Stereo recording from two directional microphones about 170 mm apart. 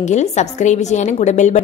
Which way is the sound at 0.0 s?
45° left (ahead or behind).